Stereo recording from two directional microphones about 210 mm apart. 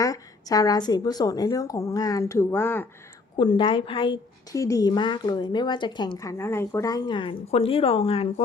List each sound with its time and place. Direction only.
0.0 s a woman's voice: 15° left (ahead or behind)
3.3 s a woman's voice: 20° left (ahead or behind)